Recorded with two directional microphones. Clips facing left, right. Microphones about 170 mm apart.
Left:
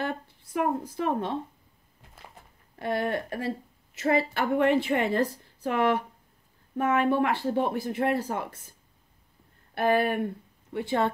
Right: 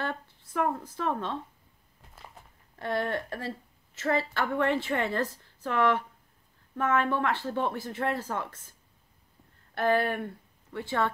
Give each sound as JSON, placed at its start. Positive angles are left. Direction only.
{"t": 0.0, "sound": "a sound", "side_deg": 15}
{"t": 0.8, "sound": "speech", "side_deg": 15}
{"t": 2.8, "sound": "speech", "side_deg": 10}
{"t": 9.8, "sound": "speech", "side_deg": 15}